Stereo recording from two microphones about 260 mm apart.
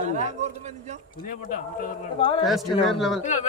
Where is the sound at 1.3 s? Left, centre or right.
Left.